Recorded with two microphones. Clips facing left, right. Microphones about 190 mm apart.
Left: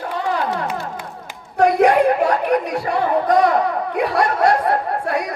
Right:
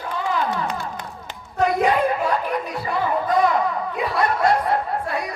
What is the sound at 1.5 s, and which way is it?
Chatter, 70° left (ahead or behind).